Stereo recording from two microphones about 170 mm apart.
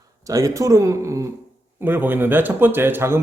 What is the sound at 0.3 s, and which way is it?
A man's voice, 20° right (ahead or behind).